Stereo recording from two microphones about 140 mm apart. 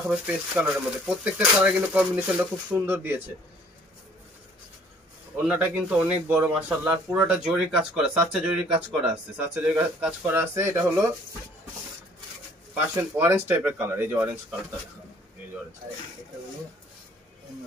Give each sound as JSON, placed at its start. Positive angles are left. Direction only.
{"t": 0.1, "sound": "speech", "side_deg": -5}
{"t": 5.5, "sound": "speech", "side_deg": -10}
{"t": 12.9, "sound": "speech", "side_deg": -20}